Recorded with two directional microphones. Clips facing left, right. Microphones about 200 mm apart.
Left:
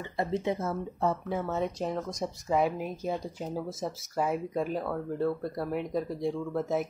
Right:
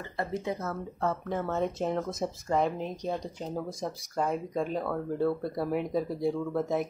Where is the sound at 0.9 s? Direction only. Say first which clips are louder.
Even; 10° left (ahead or behind).